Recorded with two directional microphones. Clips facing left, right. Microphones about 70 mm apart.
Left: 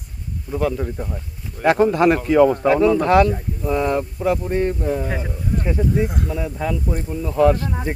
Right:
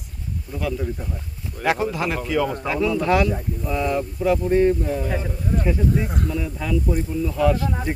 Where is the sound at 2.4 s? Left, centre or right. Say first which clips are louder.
Left 8 dB; left.